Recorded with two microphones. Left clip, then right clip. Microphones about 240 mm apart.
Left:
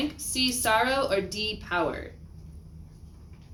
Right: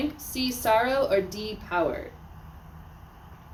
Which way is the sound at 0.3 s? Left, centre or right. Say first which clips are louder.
Even; centre.